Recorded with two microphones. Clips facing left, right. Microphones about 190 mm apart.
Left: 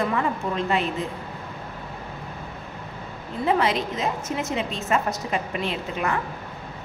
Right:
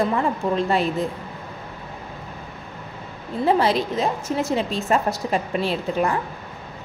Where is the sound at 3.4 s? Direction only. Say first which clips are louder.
Right 3 dB; 35° right (ahead or behind).